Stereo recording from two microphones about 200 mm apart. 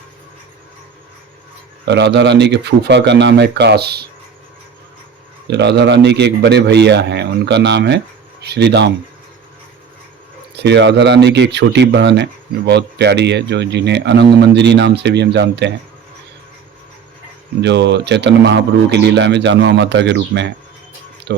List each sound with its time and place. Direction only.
1.8 s speech: 60° right (ahead or behind)
5.5 s speech: 60° right (ahead or behind)
10.5 s speech: 55° right (ahead or behind)
17.6 s speech: 60° right (ahead or behind)